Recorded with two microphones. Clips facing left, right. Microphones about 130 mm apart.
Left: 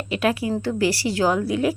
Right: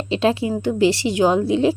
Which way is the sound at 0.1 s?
25° right (ahead or behind).